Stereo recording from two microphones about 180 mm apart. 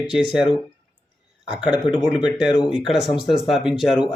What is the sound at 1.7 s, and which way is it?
Speech, 25° left (ahead or behind).